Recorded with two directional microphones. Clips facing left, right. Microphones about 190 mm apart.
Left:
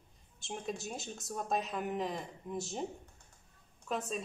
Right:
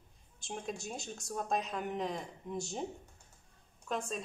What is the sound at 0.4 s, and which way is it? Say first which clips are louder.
A woman's voice: left 1 dB; centre (ahead or behind).